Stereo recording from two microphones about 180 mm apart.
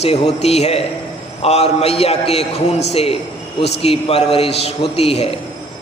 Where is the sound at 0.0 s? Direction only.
35° left (ahead or behind).